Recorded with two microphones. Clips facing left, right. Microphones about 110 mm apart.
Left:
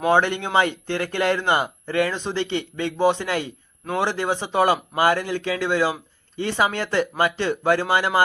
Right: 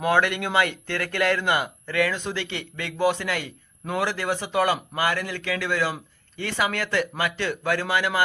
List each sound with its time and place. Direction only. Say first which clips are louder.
0.1 s a man's voice: left 3 dB; 25° left (ahead or behind)